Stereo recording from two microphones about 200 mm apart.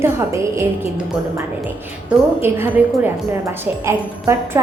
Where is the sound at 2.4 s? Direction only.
10° right (ahead or behind).